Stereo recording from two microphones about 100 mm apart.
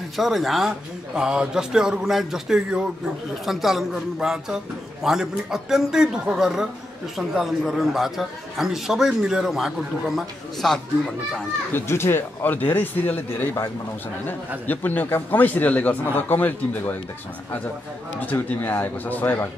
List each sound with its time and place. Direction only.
0.2 s a man's voice: centre (ahead or behind)
11.7 s speech: 25° left (ahead or behind)
14.7 s speech: 20° left (ahead or behind)
18.2 s speech: 20° left (ahead or behind)